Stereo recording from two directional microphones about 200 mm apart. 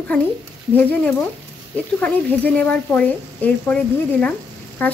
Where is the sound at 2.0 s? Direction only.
5° left (ahead or behind).